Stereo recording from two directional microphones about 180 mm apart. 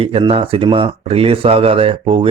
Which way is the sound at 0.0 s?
30° right (ahead or behind).